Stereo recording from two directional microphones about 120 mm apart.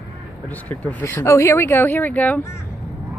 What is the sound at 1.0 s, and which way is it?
Speech, 25° left (ahead or behind).